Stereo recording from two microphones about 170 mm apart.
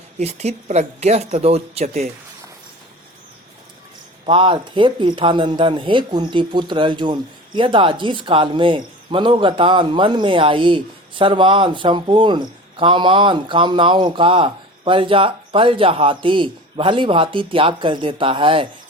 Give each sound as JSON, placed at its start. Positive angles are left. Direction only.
{"t": 0.2, "sound": "speech", "side_deg": -40}
{"t": 4.3, "sound": "speech", "side_deg": -30}